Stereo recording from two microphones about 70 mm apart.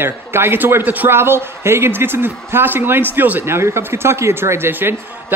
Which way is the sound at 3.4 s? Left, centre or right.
Right.